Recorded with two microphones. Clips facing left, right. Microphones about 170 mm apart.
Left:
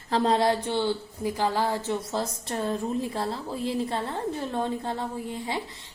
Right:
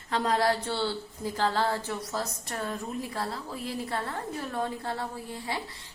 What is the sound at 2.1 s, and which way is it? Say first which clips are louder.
A woman's voice: left 4 dB; 25° left (ahead or behind).